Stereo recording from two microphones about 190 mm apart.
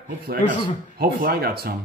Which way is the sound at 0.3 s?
55° right (ahead or behind).